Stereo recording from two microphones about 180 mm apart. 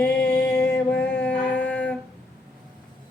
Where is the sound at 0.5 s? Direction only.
65° left (ahead or behind).